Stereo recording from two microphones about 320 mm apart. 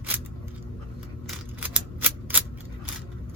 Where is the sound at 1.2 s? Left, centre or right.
Centre.